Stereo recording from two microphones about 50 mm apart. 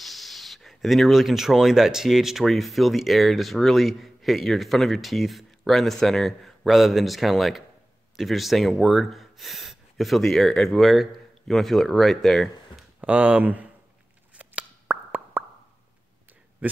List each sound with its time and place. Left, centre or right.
0.0 s speech: centre
13.0 s speech: right
14.3 s plop: right